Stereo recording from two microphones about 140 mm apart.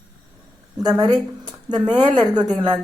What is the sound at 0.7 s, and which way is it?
Speech, 30° right (ahead or behind).